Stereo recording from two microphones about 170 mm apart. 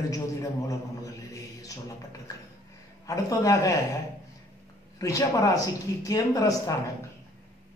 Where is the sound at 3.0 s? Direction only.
20° left (ahead or behind).